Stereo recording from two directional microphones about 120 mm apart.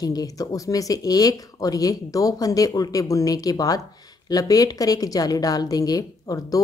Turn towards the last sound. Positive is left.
turn(degrees=30)  # may be behind; listen again after turning